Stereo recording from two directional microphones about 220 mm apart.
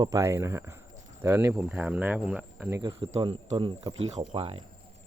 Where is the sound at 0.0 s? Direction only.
15° right (ahead or behind).